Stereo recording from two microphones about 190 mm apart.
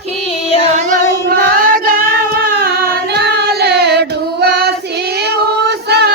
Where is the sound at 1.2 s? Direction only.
50° right (ahead or behind).